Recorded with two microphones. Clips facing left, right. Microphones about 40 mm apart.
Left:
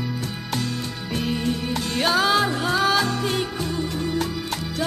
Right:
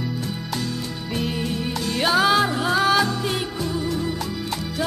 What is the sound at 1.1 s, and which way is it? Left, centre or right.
Music, centre.